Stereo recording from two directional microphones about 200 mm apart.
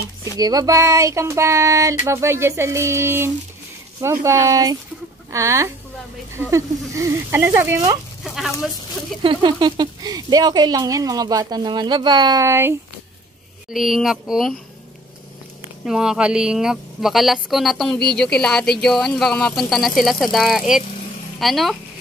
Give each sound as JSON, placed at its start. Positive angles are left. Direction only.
{"t": 0.2, "sound": "speech", "side_deg": -20}
{"t": 8.2, "sound": "speech", "side_deg": 0}
{"t": 9.2, "sound": "speech", "side_deg": -25}
{"t": 13.7, "sound": "speech", "side_deg": 0}
{"t": 15.8, "sound": "speech", "side_deg": -5}